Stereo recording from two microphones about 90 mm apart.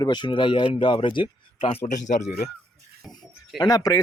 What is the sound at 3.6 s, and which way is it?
Speech, 45° left (ahead or behind).